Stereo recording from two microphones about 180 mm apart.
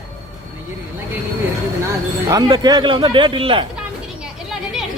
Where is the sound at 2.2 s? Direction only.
20° right (ahead or behind).